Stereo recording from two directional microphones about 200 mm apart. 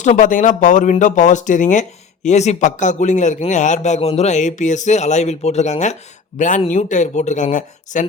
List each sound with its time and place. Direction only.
0.0 s speech: 40° left (ahead or behind)